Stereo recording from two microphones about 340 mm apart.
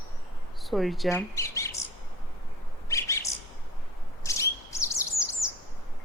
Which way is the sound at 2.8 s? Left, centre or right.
Centre.